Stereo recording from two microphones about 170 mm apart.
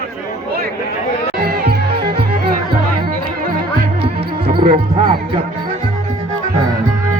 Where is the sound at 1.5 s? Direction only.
65° right (ahead or behind).